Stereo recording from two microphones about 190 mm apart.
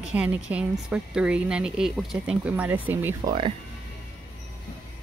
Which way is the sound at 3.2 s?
25° right (ahead or behind).